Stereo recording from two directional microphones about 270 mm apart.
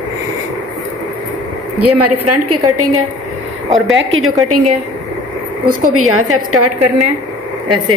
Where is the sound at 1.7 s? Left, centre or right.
Right.